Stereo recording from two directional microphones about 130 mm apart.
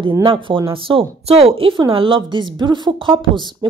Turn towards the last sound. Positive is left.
turn(degrees=-35)  # may be behind; listen again after turning